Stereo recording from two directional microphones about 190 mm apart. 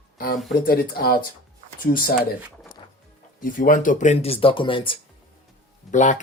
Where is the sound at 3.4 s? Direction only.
45° left (ahead or behind); by 4.9 s 25° left (ahead or behind).